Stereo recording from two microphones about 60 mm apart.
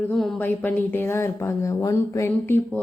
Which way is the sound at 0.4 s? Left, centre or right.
Left.